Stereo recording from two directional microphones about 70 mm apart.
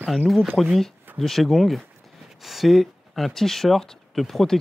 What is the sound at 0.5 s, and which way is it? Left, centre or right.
Speech, centre.